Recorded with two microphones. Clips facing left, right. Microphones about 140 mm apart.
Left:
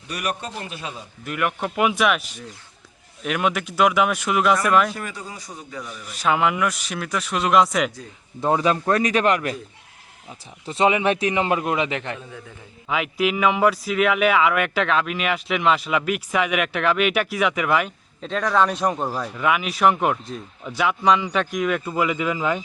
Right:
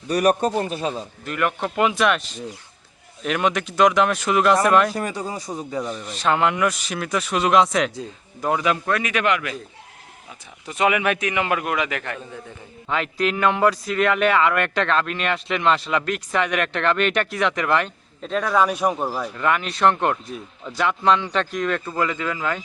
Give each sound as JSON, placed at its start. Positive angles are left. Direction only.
{"t": 0.1, "sound": "a man's voice", "side_deg": -40}
{"t": 1.2, "sound": "speech", "side_deg": 10}
{"t": 4.9, "sound": "a man's voice", "side_deg": -35}
{"t": 6.1, "sound": "speech", "side_deg": 5}
{"t": 8.4, "sound": "a man's voice", "side_deg": 30}
{"t": 10.7, "sound": "a man's voice", "side_deg": 30}
{"t": 12.9, "sound": "speech", "side_deg": 5}